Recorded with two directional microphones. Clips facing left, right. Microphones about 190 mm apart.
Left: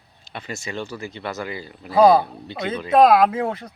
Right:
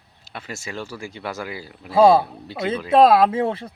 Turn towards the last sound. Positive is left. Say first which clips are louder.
# right 1 dB
turn(degrees=-30)  # may be behind; listen again after turning